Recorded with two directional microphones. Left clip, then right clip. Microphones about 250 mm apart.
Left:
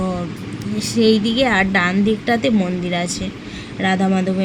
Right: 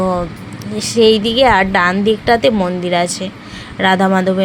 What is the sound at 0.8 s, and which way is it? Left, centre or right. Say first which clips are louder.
A woman's voice: right 6 dB; right.